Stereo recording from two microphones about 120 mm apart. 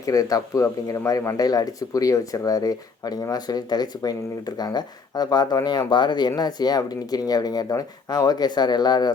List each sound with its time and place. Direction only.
0.0 s speech: 30° left (ahead or behind)